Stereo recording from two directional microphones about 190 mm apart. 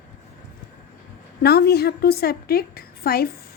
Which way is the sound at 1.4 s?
55° left (ahead or behind).